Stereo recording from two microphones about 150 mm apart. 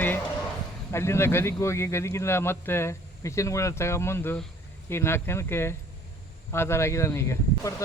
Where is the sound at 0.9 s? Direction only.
15° left (ahead or behind).